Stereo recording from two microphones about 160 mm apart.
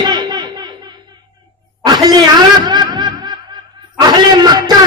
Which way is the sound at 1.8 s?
25° right (ahead or behind).